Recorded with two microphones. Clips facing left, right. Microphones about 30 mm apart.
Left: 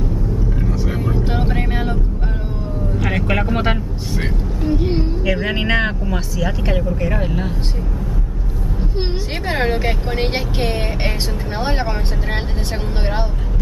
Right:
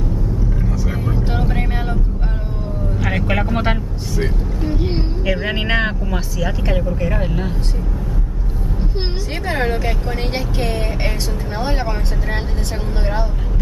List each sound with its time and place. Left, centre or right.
0.8 s vehicle: centre
3.0 s vehicle: centre
4.6 s vehicle: centre
5.3 s speech: centre
9.5 s speech: left